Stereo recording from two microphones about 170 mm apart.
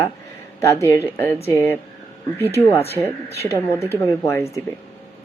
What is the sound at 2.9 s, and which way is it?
A woman's voice, 15° left (ahead or behind).